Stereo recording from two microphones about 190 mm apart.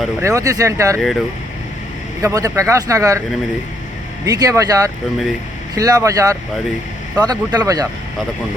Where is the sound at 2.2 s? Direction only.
15° right (ahead or behind).